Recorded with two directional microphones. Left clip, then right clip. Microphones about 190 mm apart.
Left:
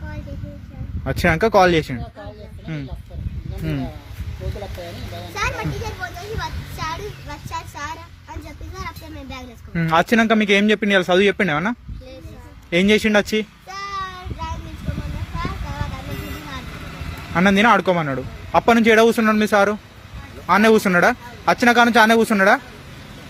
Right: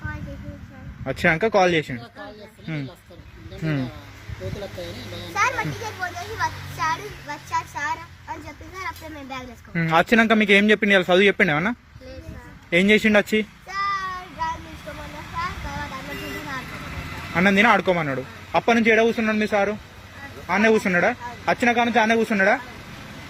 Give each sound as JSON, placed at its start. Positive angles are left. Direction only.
{"t": 1.0, "sound": "a man's voice", "side_deg": 10}
{"t": 5.4, "sound": "a child's voice", "side_deg": -10}
{"t": 9.7, "sound": "a man's voice", "side_deg": 5}
{"t": 13.7, "sound": "child singing", "side_deg": -5}
{"t": 17.3, "sound": "a man's voice", "side_deg": 10}